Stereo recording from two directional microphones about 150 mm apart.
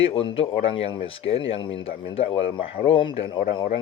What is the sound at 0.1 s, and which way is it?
Speech, 40° left (ahead or behind).